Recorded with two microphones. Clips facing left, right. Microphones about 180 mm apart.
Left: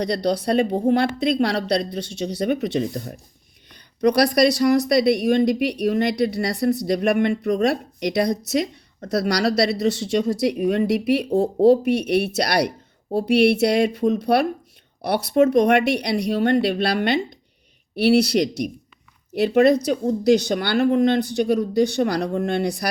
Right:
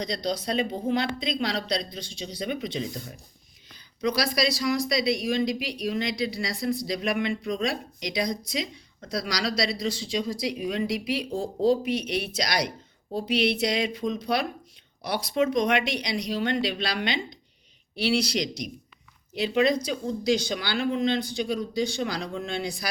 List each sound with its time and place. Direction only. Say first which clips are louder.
0.0 s speech: left 7 dB; 65° left (ahead or behind)